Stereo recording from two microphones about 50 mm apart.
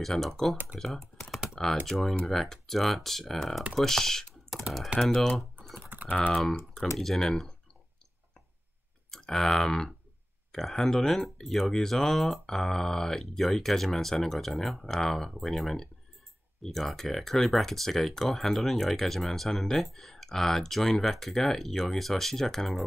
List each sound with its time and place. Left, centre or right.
0.0 s speech: centre
0.7 s computer keyboard: centre
1.9 s speech: centre
4.7 s speech: right
5.0 s speech: centre
5.8 s typing: right
7.0 s speech: centre
9.1 s speech: centre